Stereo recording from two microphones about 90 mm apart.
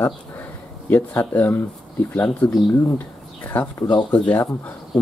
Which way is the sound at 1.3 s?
20° left (ahead or behind).